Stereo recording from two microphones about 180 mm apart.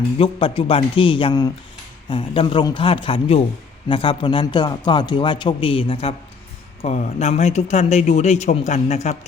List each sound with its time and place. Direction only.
0.2 s speech: 30° left (ahead or behind)